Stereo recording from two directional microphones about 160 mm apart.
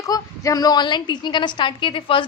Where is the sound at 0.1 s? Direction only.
25° left (ahead or behind).